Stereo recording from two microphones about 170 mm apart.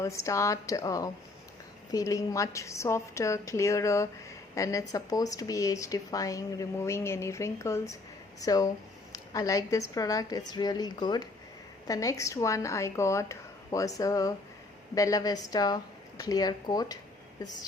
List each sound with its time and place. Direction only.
0.0 s a woman's voice: 15° left (ahead or behind)